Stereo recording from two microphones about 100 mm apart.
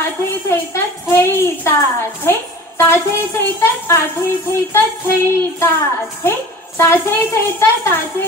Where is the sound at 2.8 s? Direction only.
25° left (ahead or behind).